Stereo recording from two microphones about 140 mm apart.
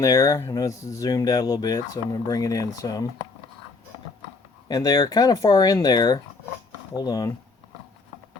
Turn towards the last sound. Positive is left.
turn(degrees=25)  # may be behind; listen again after turning